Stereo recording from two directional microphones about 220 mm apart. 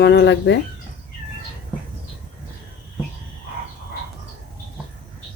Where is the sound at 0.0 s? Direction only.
50° left (ahead or behind).